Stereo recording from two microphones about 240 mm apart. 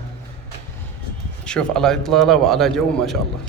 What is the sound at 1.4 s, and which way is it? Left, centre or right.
A man's voice, centre.